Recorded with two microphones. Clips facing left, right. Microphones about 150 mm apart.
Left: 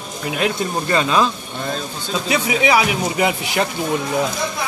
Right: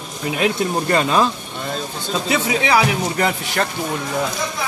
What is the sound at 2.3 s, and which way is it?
Speech, 10° left (ahead or behind).